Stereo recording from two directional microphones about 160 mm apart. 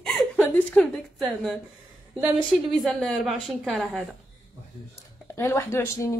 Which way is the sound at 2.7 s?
Centre (ahead or behind).